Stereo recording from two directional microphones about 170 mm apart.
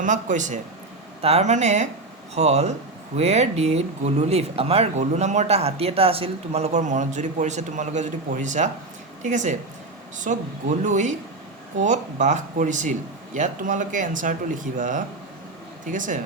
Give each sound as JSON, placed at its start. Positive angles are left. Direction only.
{"t": 0.0, "sound": "speech", "side_deg": -45}